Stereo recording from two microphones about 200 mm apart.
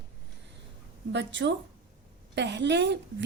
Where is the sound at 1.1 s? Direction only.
60° right (ahead or behind).